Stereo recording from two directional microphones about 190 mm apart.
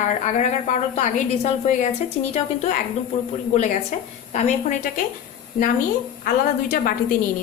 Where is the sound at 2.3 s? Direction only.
35° left (ahead or behind).